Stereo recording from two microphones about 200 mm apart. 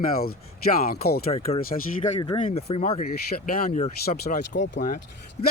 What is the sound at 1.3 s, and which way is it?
Speech, 30° left (ahead or behind).